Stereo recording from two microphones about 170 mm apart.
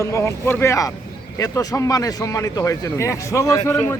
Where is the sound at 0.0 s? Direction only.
15° left (ahead or behind).